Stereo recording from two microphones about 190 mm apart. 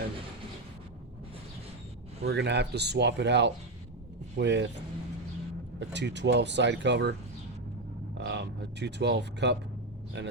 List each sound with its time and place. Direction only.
2.2 s speech: 65° right (ahead or behind)
5.9 s speech: 65° right (ahead or behind)
8.2 s speech: 65° right (ahead or behind)